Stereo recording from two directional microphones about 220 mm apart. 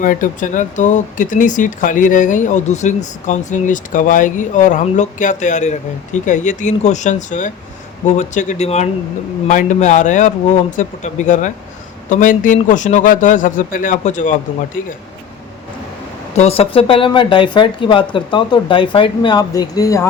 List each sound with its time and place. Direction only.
0.0 s speech: 35° left (ahead or behind)
16.3 s speech: 30° left (ahead or behind)